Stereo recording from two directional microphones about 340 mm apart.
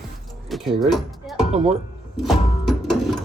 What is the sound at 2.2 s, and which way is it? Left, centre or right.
Music, centre.